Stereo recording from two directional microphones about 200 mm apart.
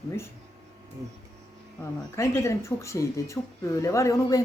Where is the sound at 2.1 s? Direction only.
15° left (ahead or behind).